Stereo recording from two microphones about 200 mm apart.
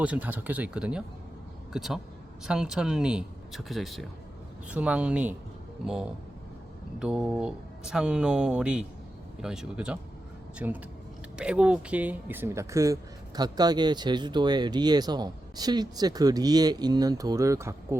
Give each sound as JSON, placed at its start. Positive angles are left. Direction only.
{"t": 0.0, "sound": "speech", "side_deg": -5}